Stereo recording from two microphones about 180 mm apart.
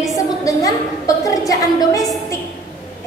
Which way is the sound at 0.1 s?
20° left (ahead or behind).